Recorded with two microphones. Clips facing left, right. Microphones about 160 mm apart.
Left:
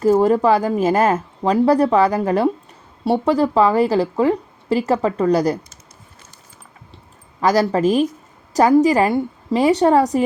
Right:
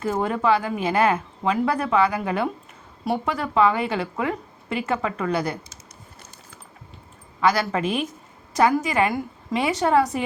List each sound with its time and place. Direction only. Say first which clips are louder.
0.0 s a woman's voice: left 9 dB; 35° left (ahead or behind)
7.4 s a woman's voice: left 6 dB; 40° left (ahead or behind)